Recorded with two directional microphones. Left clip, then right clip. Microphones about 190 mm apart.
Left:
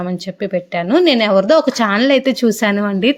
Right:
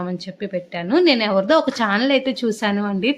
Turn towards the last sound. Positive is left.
turn(degrees=35)  # may be behind; listen again after turning